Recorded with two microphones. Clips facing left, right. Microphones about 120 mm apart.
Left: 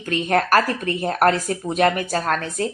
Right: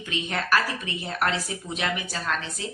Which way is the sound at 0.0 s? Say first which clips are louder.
Left 10 dB; 50° left (ahead or behind).